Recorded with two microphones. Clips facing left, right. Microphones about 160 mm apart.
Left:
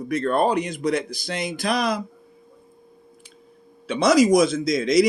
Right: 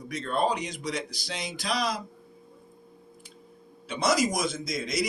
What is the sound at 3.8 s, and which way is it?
A man's voice, 80° left.